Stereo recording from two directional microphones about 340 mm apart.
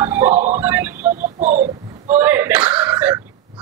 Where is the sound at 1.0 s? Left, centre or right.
Right.